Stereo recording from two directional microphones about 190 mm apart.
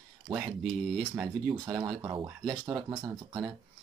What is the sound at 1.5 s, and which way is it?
Speech, 20° right (ahead or behind).